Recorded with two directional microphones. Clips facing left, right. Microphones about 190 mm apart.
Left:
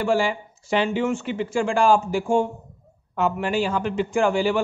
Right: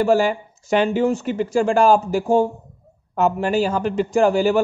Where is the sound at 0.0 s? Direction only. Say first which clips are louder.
Right 5 dB; 45° right (ahead or behind).